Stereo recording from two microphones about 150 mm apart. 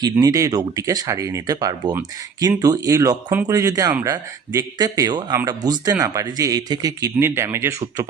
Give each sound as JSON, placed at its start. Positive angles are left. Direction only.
{"t": 0.0, "sound": "speech", "side_deg": -25}